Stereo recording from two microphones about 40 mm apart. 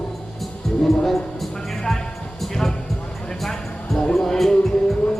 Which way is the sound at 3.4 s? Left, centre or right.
Centre.